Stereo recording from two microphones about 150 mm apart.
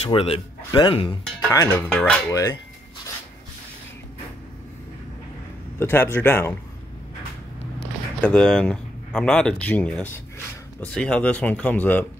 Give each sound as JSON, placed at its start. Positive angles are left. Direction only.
{"t": 0.0, "sound": "a man's voice", "side_deg": 40}
{"t": 1.5, "sound": "speech", "side_deg": 20}
{"t": 1.9, "sound": "speech", "side_deg": 5}
{"t": 5.8, "sound": "speech", "side_deg": 15}
{"t": 8.2, "sound": "speech", "side_deg": 5}